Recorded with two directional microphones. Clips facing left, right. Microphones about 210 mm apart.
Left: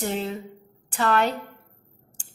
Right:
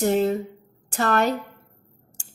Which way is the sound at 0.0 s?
45° right (ahead or behind).